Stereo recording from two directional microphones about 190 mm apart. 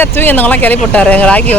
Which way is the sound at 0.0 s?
10° left (ahead or behind).